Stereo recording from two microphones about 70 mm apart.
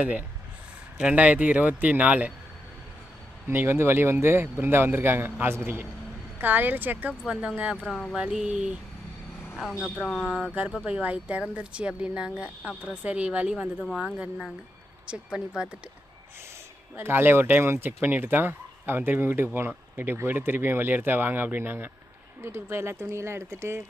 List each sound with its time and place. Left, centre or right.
1.0 s speech: centre
3.4 s speech: right
7.2 s speech: centre
7.7 s speech: centre
8.1 s speech: centre
9.6 s speech: centre
10.8 s speech: centre
15.3 s speech: centre
16.9 s speech: right